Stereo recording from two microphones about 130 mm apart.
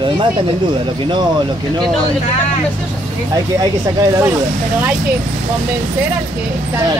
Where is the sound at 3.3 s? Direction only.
25° right (ahead or behind).